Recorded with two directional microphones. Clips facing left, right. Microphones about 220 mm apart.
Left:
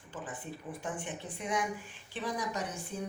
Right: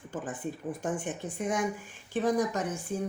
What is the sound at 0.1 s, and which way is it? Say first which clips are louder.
Speech: right 6 dB; 45° right (ahead or behind).